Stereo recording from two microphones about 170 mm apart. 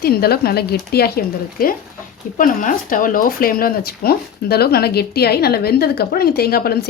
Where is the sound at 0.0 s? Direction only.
65° left (ahead or behind).